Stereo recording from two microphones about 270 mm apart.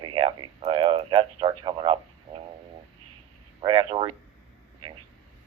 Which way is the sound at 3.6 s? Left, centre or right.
Centre.